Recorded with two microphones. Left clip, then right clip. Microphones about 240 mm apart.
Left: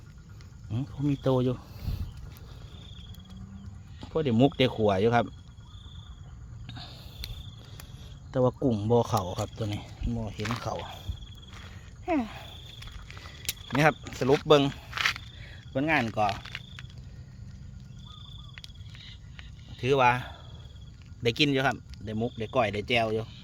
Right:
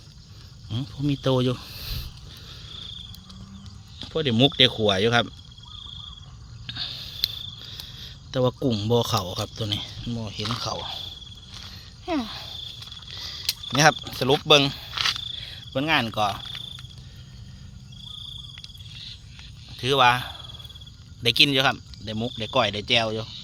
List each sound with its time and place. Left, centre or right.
0.7 s speech: centre
4.0 s speech: centre
6.7 s cricket: centre
9.6 s speech: centre
12.0 s speech: centre
13.7 s cricket: centre
14.4 s speech: centre
14.9 s a sound: left
15.4 s speech: centre
19.7 s speech: centre